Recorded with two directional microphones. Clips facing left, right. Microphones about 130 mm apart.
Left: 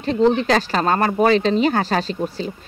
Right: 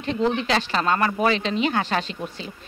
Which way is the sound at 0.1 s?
35° left (ahead or behind).